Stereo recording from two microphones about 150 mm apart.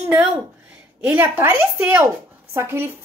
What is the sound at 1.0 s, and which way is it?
A woman's voice, 10° right (ahead or behind).